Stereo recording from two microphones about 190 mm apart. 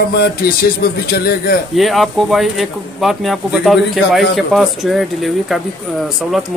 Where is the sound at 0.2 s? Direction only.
55° left (ahead or behind).